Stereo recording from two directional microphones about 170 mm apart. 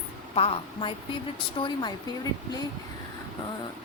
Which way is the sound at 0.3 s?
30° left (ahead or behind).